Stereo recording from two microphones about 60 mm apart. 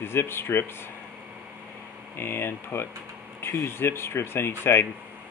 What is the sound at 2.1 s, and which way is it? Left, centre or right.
Speech, left.